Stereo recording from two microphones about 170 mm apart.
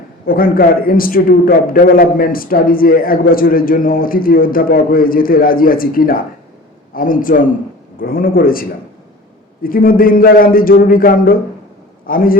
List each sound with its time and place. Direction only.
0.3 s a man's voice: 60° left (ahead or behind)
9.6 s a man's voice: 55° left (ahead or behind)